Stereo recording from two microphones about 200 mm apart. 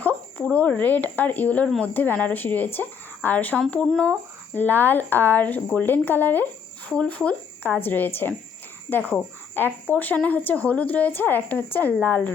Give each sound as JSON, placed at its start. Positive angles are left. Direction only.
{"t": 0.0, "sound": "speech", "side_deg": 10}